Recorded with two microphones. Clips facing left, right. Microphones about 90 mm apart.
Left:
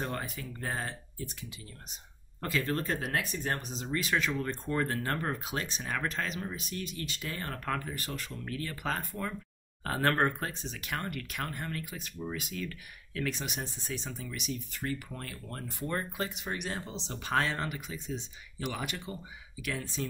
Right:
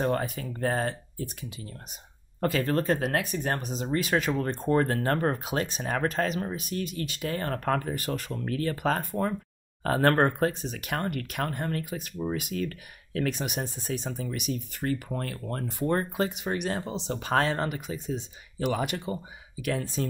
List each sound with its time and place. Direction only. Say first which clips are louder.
0.0 s speech: right 9 dB; 45° right (ahead or behind)
2.4 s speech: right 6 dB; 50° right (ahead or behind)
10.6 s speech: right 6 dB; 55° right (ahead or behind)